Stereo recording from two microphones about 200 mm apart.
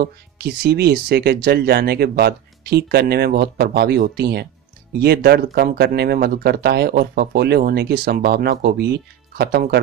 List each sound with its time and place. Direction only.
0.0 s speech: 50° right (ahead or behind)